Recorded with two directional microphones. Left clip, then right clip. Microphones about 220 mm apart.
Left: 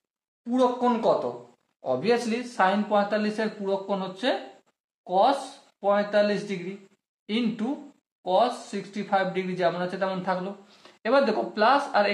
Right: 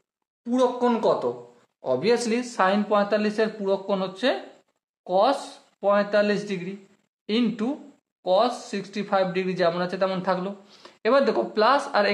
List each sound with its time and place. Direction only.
0.5 s speech: 40° right (ahead or behind)